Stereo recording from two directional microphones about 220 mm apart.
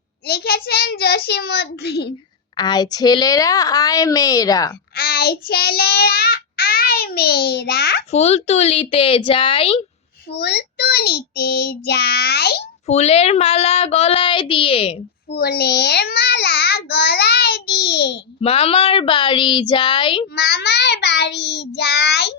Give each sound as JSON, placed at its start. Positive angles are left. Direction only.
{"t": 0.3, "sound": "a child's voice", "side_deg": 45}
{"t": 2.6, "sound": "a woman's voice", "side_deg": 15}
{"t": 4.9, "sound": "child singing", "side_deg": 45}
{"t": 8.1, "sound": "speech", "side_deg": 30}
{"t": 10.2, "sound": "a child's voice", "side_deg": 45}
{"t": 12.9, "sound": "speech", "side_deg": 30}
{"t": 15.3, "sound": "child singing", "side_deg": 45}
{"t": 18.3, "sound": "speech", "side_deg": 25}
{"t": 20.3, "sound": "child singing", "side_deg": 45}